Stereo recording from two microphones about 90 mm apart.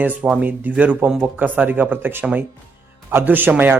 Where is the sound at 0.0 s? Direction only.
20° right (ahead or behind).